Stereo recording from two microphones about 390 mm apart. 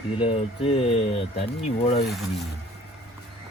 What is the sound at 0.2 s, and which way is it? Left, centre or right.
Speech, centre.